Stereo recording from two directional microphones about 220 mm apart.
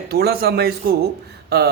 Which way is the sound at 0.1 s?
45° right (ahead or behind).